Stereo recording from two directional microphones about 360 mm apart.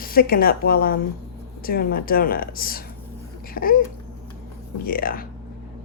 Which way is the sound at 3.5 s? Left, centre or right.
Left.